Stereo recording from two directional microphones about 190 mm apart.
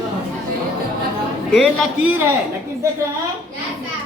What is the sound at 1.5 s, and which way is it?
Speech, 5° left (ahead or behind).